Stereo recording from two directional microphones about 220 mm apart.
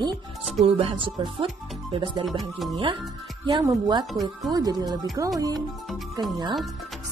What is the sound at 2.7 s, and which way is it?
Speech, 20° right (ahead or behind).